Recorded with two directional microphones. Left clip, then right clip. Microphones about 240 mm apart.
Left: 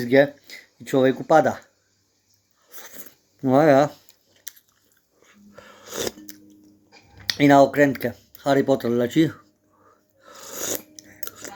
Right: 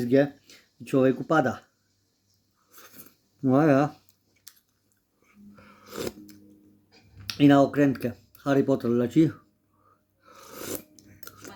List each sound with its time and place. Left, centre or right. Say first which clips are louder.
0.0 s speech: left 5 dB; centre
2.6 s a sound: left 8 dB; centre
5.2 s biting: left 7 dB; centre
7.2 s speech: left 5 dB; centre
10.2 s biting: left 7 dB; centre